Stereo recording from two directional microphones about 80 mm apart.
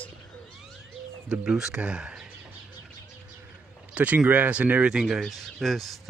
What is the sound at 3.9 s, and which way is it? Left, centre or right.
Speech, centre.